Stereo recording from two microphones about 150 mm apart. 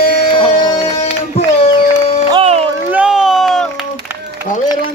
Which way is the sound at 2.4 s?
45° right (ahead or behind).